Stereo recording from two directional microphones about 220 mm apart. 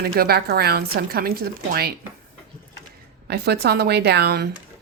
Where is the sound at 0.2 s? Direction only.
45° right (ahead or behind).